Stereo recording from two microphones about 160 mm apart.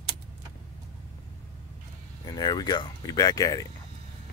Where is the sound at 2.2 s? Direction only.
25° left (ahead or behind).